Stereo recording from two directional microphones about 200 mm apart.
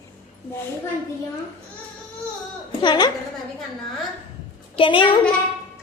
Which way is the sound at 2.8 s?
20° left (ahead or behind).